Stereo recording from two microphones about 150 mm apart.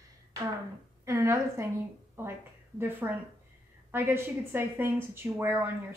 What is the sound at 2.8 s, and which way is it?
A woman's voice, 15° right (ahead or behind).